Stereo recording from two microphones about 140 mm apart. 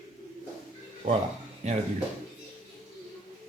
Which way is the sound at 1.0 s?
55° right (ahead or behind).